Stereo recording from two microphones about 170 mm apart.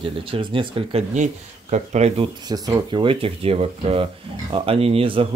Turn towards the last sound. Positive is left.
turn(degrees=-35)  # may be behind; listen again after turning